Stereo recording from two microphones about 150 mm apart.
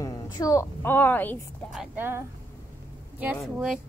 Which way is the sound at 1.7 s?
15° right (ahead or behind).